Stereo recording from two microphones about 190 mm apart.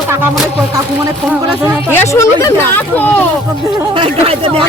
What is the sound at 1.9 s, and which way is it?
Speech, 15° left (ahead or behind).